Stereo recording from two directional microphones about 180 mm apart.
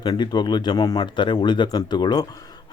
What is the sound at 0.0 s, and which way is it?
Speech, 25° left (ahead or behind).